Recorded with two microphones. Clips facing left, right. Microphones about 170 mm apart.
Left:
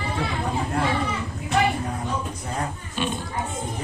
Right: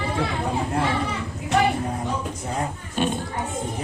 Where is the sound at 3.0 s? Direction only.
45° right (ahead or behind).